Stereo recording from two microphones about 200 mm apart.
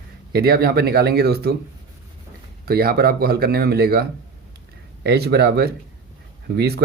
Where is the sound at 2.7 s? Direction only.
50° right (ahead or behind).